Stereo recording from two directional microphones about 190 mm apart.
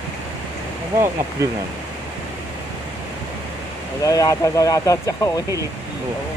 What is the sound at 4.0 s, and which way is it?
Speech, 20° left (ahead or behind).